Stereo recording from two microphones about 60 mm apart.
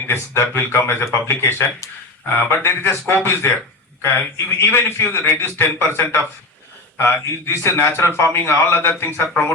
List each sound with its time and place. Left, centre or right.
0.1 s speech: left